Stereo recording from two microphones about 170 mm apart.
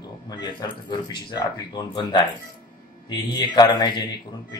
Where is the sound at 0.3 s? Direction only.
25° left (ahead or behind).